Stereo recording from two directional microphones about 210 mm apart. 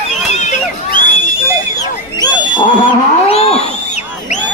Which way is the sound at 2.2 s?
20° left (ahead or behind).